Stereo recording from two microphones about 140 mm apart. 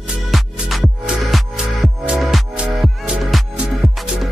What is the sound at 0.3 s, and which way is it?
Music, centre (ahead or behind).